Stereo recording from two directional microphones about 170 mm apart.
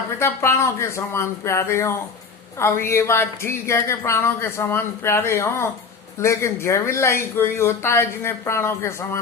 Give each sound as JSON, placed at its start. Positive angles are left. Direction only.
{"t": 0.2, "sound": "speech", "side_deg": 15}